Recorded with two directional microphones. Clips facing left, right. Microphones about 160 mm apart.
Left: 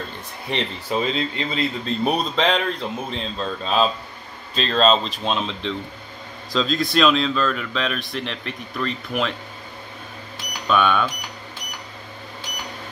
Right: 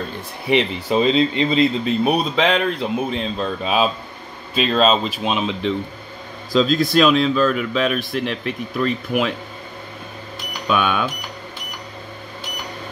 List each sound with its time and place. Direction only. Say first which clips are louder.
0.5 s speech: right 8 dB; 10° right (ahead or behind)
0.9 s speech: right 7 dB; 20° right (ahead or behind)
2.0 s speech: right 1 dB; 5° right (ahead or behind)
10.7 s speech: even; 5° right (ahead or behind)